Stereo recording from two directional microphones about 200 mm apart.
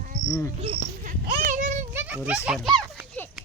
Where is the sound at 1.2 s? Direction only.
50° right (ahead or behind).